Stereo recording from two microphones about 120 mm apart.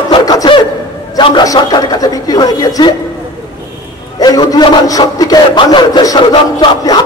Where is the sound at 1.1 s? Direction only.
35° left (ahead or behind).